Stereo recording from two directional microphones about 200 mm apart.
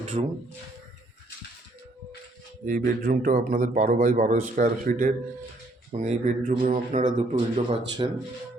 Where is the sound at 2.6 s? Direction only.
45° right (ahead or behind).